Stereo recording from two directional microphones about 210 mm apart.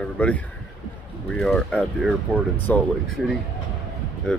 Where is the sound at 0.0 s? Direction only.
5° left (ahead or behind).